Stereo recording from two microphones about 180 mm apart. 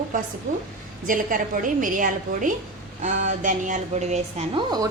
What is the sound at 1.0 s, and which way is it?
A woman's voice, 50° right (ahead or behind).